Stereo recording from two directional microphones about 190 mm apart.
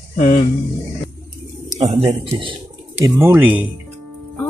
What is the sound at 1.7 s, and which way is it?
Speech, 35° right (ahead or behind).